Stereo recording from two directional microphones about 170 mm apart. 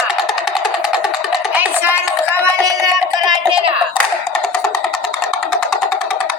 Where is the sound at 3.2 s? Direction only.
5° right (ahead or behind).